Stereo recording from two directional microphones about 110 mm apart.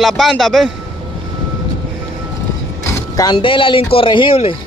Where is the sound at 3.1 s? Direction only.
40° left (ahead or behind).